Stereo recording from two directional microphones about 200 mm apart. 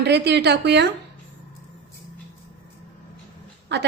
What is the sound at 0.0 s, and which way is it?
Speech, 55° right (ahead or behind).